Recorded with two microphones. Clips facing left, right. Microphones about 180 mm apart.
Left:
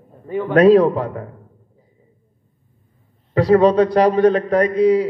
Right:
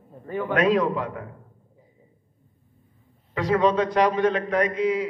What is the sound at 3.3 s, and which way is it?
A man's voice, 35° left (ahead or behind).